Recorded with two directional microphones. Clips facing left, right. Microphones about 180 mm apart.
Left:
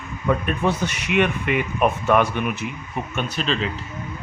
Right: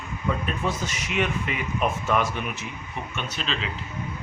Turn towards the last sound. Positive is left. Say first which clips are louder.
# left 7 dB
turn(degrees=45)  # may be behind; listen again after turning